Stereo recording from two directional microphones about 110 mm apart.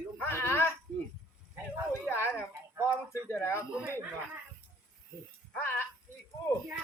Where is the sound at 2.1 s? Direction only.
20° left (ahead or behind).